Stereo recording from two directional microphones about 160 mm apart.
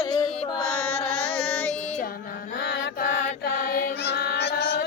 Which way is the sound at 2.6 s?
70° left (ahead or behind).